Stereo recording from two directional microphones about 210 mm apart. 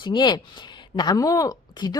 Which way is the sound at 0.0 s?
20° left (ahead or behind).